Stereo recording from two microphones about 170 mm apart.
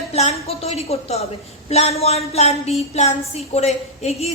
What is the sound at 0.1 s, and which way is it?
A woman's voice, 40° left (ahead or behind).